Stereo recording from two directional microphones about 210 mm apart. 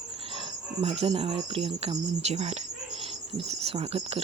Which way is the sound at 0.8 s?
30° right (ahead or behind).